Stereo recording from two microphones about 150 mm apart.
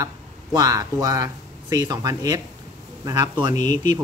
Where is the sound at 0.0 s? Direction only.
25° right (ahead or behind).